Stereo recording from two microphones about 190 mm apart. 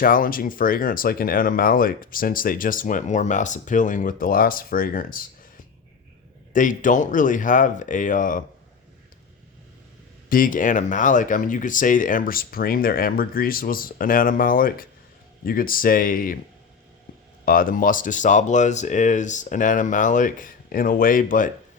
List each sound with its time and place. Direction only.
0.0 s speech: 45° left (ahead or behind)
6.5 s speech: 45° left (ahead or behind)
10.2 s speech: 45° left (ahead or behind)
17.4 s speech: 45° left (ahead or behind)